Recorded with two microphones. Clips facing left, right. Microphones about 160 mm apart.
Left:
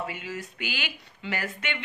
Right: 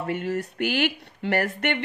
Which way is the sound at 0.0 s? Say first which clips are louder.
Right 8 dB; 60° right (ahead or behind).